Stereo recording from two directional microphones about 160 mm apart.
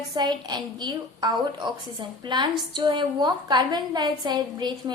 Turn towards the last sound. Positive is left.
turn(degrees=-25)  # may be behind; listen again after turning